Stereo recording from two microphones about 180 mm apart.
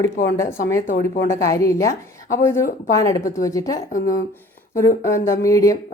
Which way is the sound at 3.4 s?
20° left (ahead or behind).